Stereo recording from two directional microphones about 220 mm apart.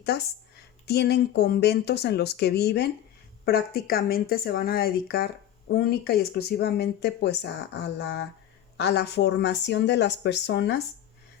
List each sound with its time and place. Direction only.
0.0 s a woman's voice: 45° left (ahead or behind)